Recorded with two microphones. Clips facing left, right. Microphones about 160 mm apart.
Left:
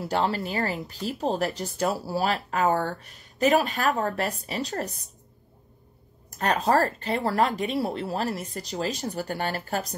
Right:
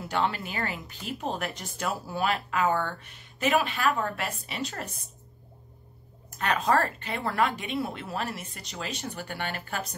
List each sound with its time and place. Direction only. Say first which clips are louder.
0.0 s speech: left 3 dB; 35° left (ahead or behind)
6.3 s speech: left 3 dB; 40° left (ahead or behind)